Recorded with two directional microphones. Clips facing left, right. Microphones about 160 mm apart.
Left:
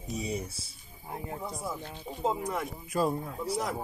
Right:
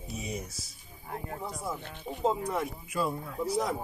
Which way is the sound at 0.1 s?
40° left (ahead or behind).